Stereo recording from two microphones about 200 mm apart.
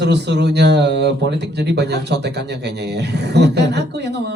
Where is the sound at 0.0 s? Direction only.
55° right (ahead or behind).